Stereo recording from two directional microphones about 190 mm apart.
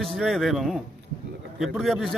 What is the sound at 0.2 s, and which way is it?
Speech, centre (ahead or behind).